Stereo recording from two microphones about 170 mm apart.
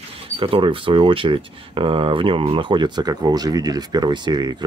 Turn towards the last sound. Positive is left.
turn(degrees=-25)  # may be behind; listen again after turning